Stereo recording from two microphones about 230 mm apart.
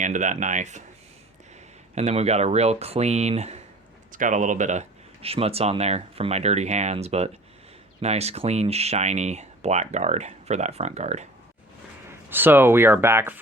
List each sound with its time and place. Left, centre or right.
0.0 s speech: right
2.0 s speech: right
12.3 s speech: centre